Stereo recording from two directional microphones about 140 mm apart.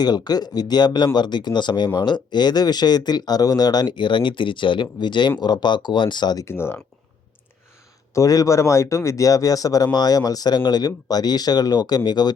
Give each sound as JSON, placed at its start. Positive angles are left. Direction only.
{"t": 0.0, "sound": "speech", "side_deg": 30}
{"t": 6.4, "sound": "speech", "side_deg": 15}
{"t": 8.1, "sound": "speech", "side_deg": 25}